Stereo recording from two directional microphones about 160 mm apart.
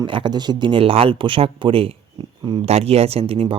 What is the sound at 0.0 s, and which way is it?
Speech, 30° right (ahead or behind).